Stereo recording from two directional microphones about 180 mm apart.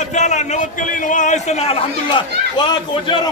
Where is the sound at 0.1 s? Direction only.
40° left (ahead or behind); by 3.2 s 25° left (ahead or behind).